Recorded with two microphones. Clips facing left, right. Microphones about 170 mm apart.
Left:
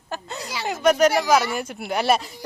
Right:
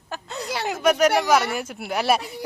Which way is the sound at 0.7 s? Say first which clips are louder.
Left 1 dB; 5° right (ahead or behind).